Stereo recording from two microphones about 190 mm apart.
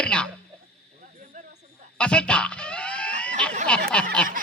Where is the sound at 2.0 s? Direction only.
5° left (ahead or behind).